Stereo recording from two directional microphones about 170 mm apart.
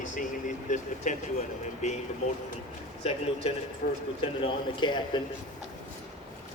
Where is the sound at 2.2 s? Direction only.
40° left (ahead or behind).